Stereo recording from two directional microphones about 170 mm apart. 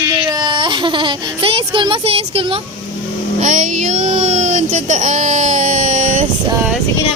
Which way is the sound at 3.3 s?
50° right (ahead or behind).